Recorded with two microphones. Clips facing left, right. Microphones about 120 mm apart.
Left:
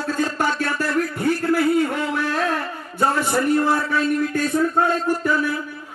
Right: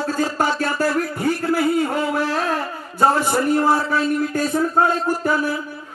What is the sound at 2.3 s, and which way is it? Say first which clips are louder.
A man's voice: right 1 dB; 30° right (ahead or behind).